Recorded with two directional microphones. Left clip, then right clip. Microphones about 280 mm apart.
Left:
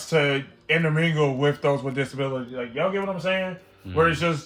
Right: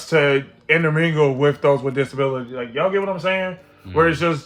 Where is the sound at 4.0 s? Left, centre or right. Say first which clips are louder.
Right 4 dB; centre.